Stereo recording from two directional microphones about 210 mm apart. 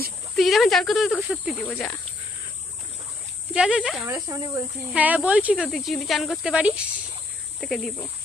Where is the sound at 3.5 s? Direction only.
5° right (ahead or behind).